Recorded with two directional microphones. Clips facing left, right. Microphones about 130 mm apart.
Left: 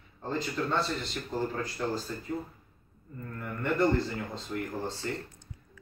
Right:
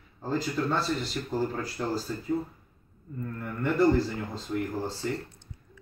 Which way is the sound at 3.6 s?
Centre (ahead or behind).